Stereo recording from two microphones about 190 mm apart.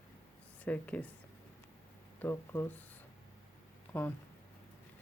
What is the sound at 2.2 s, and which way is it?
Speech, 10° left (ahead or behind).